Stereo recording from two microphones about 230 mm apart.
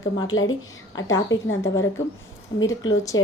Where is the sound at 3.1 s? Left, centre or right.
Left.